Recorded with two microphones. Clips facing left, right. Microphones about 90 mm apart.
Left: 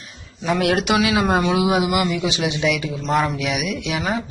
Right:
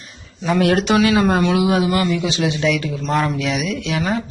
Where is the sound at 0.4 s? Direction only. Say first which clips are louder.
Right 3 dB; centre (ahead or behind).